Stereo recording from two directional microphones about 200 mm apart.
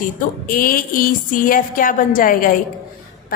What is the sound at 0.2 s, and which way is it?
A woman's voice, 45° left (ahead or behind).